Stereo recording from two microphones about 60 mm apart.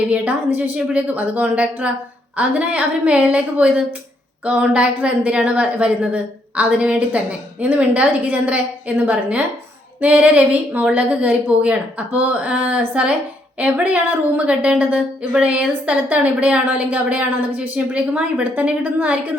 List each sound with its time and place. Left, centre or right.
0.1 s a woman's voice: right